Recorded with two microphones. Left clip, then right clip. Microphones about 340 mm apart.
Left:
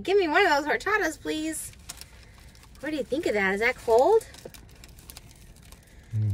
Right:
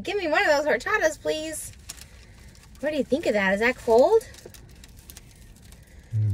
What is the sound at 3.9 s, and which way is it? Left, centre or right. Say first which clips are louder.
Speech: right 2 dB; right.